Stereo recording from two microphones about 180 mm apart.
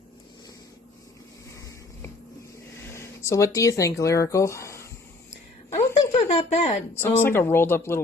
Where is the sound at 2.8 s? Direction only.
15° left (ahead or behind).